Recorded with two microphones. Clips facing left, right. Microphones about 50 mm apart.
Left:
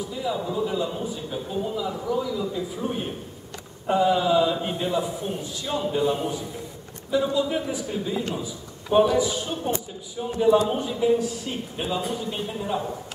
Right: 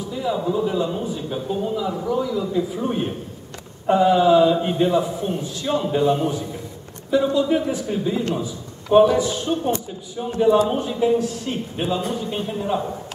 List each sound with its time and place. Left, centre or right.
0.1 s a man's voice: centre
9.2 s speech: centre
10.4 s a man's voice: centre